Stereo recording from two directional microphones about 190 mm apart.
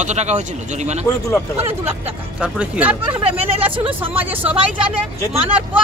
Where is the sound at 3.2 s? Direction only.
30° right (ahead or behind).